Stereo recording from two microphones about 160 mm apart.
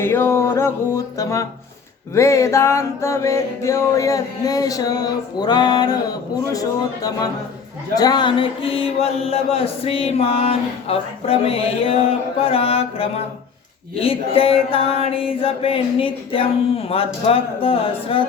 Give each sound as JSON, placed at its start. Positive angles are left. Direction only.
{"t": 0.0, "sound": "music", "side_deg": 15}
{"t": 7.9, "sound": "mantra", "side_deg": 25}